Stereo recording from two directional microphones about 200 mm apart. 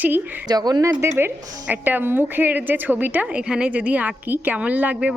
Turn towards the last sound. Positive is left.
turn(degrees=-5)  # may be behind; listen again after turning